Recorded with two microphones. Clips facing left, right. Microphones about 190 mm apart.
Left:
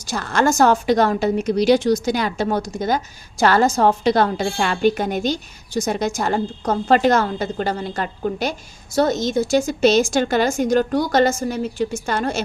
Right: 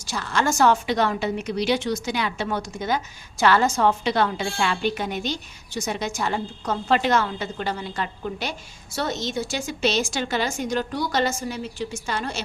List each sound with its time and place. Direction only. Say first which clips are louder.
0.0 s a woman's voice: left 5 dB; 45° left (ahead or behind)